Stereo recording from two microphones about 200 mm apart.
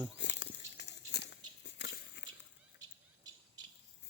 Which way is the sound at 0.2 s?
60° left (ahead or behind).